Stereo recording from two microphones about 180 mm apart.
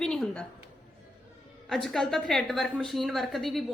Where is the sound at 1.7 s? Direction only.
Centre (ahead or behind).